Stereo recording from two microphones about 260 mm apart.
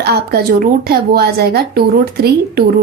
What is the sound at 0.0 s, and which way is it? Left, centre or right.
Speech, right.